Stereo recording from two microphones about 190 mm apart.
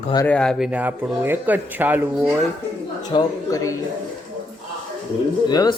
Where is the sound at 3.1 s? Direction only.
20° left (ahead or behind).